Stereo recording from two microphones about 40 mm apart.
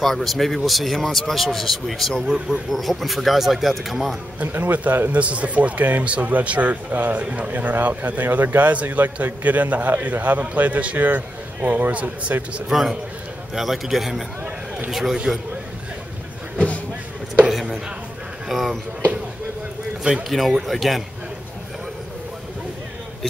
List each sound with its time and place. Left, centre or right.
0.0 s speech: centre
4.4 s a man's voice: right
12.7 s a man's voice: centre
16.5 s a sound: left
17.5 s a sound: centre
18.5 s speech: centre
20.2 s speech: centre